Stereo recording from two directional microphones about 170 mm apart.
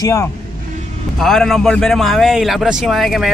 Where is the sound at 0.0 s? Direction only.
15° left (ahead or behind).